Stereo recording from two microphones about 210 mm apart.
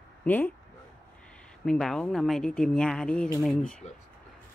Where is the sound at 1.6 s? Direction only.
Centre (ahead or behind).